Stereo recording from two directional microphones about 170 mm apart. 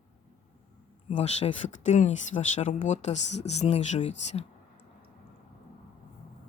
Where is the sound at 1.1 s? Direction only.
40° left (ahead or behind).